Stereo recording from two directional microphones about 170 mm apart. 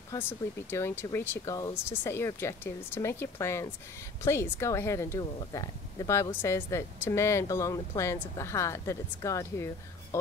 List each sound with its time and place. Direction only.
0.1 s speech: 15° left (ahead or behind)